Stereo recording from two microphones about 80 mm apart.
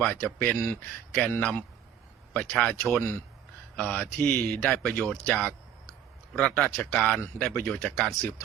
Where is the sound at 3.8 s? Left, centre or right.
Centre.